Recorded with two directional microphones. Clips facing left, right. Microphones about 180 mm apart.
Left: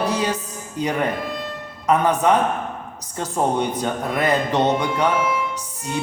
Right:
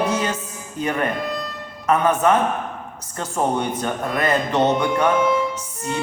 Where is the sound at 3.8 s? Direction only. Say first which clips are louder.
Left 1 dB; 15° left (ahead or behind).